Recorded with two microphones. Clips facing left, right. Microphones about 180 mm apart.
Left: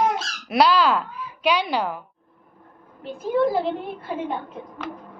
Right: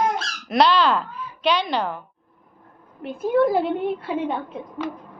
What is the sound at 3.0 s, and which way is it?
Speech, 65° right (ahead or behind).